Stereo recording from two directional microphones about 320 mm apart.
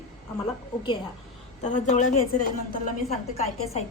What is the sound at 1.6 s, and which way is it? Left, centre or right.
A woman's voice, left.